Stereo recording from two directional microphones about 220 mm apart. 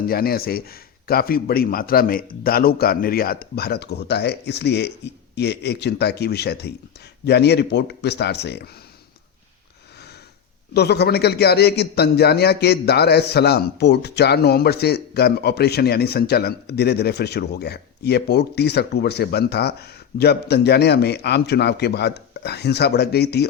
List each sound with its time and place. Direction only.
0.1 s a man's voice: 45° left (ahead or behind)
10.8 s a man's voice: 50° left (ahead or behind)